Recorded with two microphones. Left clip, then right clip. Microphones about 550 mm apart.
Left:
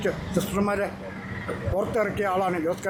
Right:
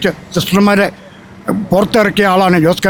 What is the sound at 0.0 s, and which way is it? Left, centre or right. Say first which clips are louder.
Speech: right 11 dB; right.